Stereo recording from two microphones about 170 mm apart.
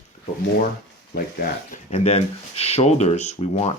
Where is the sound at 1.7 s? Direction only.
40° left (ahead or behind).